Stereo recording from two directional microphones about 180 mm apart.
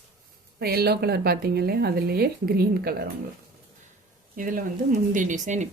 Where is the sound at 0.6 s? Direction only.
60° right (ahead or behind).